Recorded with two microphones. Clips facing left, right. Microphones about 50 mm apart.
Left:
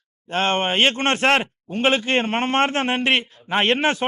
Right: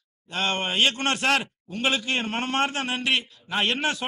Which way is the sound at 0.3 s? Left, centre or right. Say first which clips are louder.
Left 6 dB; left.